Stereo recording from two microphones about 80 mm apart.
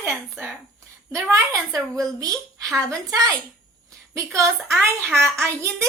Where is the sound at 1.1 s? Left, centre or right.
Right.